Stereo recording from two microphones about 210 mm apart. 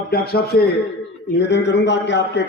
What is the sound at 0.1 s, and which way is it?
A man's voice, 50° left (ahead or behind).